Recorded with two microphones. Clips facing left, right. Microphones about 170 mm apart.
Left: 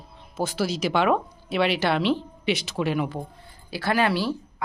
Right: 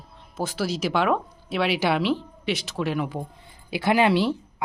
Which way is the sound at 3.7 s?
20° right (ahead or behind).